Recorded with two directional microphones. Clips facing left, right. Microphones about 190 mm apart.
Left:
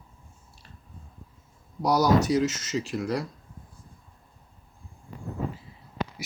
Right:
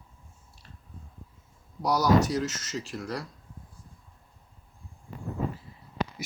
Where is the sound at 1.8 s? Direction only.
25° left (ahead or behind).